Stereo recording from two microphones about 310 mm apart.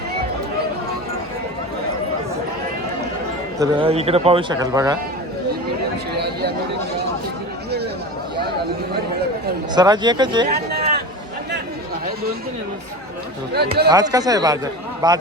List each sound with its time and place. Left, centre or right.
3.6 s a man's voice: centre
6.1 s chatter: right
9.7 s a man's voice: centre
10.7 s a sound: right
13.9 s a man's voice: centre